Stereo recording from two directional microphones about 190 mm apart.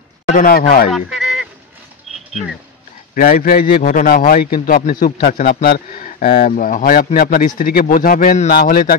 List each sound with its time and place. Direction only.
0.3 s speech: 50° left (ahead or behind)
0.9 s honk: centre (ahead or behind)
3.2 s speech: 50° left (ahead or behind)